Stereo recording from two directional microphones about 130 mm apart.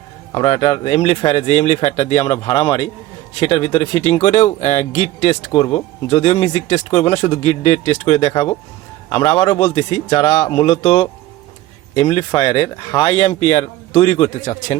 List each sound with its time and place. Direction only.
0.3 s speech: 55° left (ahead or behind)